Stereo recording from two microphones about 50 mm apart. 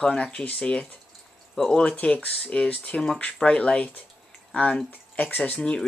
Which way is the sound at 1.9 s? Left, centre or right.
Left.